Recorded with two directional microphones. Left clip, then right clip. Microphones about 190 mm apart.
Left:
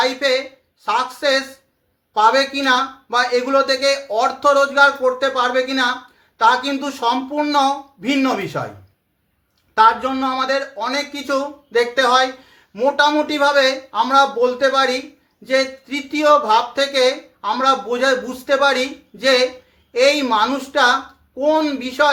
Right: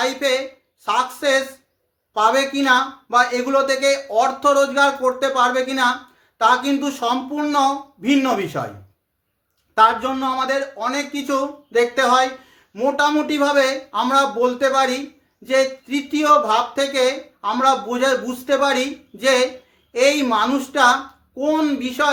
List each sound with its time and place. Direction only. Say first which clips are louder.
0.0 s speech: left 2 dB; 15° right (ahead or behind)
9.7 s speech: left 2 dB; 15° right (ahead or behind)